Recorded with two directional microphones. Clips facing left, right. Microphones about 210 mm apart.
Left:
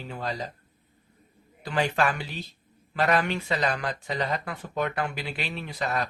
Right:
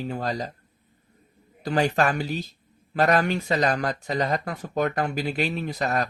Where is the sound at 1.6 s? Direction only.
40° right (ahead or behind).